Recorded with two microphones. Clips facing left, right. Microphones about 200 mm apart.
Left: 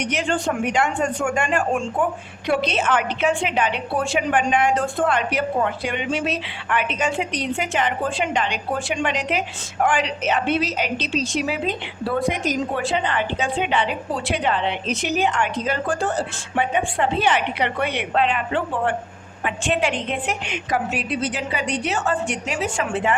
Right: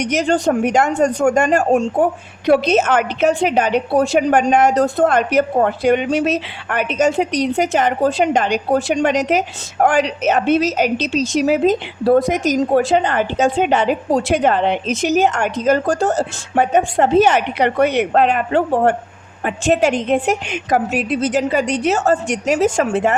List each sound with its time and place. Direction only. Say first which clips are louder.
0.0 s a woman's voice: right 7 dB; 40° right (ahead or behind)